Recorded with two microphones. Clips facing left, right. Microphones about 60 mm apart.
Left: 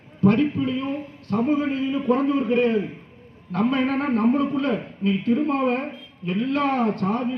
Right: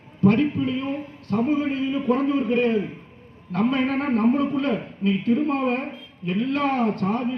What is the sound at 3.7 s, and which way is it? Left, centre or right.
A man's voice, centre.